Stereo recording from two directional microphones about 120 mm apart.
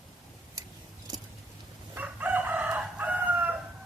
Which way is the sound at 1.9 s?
15° right (ahead or behind).